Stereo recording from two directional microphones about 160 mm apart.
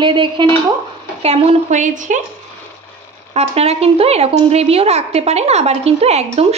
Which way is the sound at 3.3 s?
40° right (ahead or behind).